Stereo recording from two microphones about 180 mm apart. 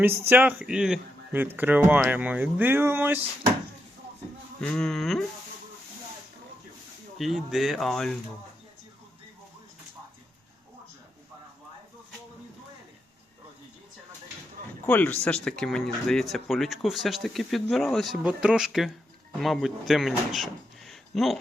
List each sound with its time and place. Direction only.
0.0 s speech: 10° right (ahead or behind)
4.6 s speech: 5° left (ahead or behind)
7.2 s speech: centre (ahead or behind)
14.8 s speech: 10° left (ahead or behind)